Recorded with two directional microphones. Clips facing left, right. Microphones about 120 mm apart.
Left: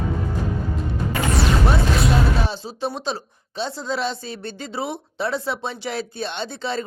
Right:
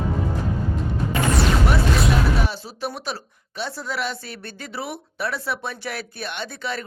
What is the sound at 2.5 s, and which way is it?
Speech, 25° left (ahead or behind).